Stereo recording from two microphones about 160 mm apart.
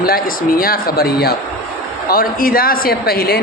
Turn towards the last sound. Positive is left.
turn(degrees=75)  # may be behind; listen again after turning